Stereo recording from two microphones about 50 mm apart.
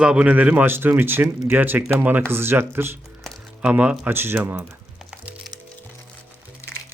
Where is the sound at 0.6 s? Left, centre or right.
Right.